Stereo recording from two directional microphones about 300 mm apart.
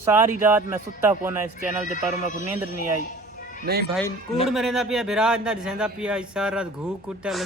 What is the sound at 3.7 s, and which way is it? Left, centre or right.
Speech, right.